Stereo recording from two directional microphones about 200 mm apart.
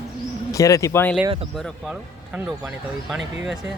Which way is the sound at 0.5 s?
15° left (ahead or behind).